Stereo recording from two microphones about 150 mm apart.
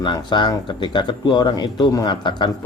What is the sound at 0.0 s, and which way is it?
Speech, 30° left (ahead or behind).